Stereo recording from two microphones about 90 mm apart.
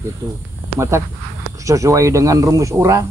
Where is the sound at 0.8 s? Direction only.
30° right (ahead or behind).